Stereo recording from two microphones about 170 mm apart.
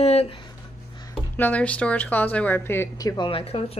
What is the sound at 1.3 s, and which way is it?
A woman's voice, 10° left (ahead or behind).